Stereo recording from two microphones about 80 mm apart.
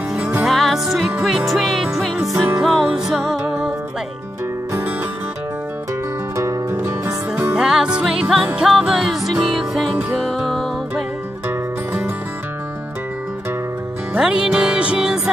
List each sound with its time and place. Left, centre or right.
0.4 s music: centre
6.3 s music: right
7.5 s music: centre
11.4 s music: right
14.1 s music: centre